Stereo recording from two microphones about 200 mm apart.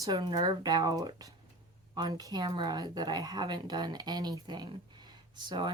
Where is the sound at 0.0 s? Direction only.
20° right (ahead or behind).